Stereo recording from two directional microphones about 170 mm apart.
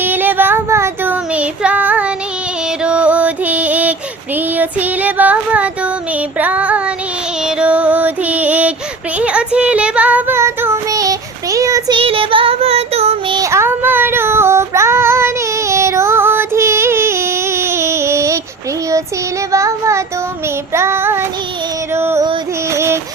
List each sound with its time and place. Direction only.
0.0 s child singing: 10° right (ahead or behind)
2.8 s music: 5° right (ahead or behind)
4.4 s child singing: 10° right (ahead or behind)
7.4 s music: 5° right (ahead or behind)
9.1 s child singing: 5° right (ahead or behind)
11.9 s child singing: 30° right (ahead or behind)
13.4 s female singing: 15° right (ahead or behind)
19.5 s child singing: 20° right (ahead or behind)
21.9 s music: 15° right (ahead or behind)
22.7 s a sound: 15° right (ahead or behind)